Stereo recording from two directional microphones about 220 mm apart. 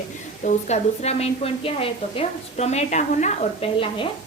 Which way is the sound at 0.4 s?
30° left (ahead or behind).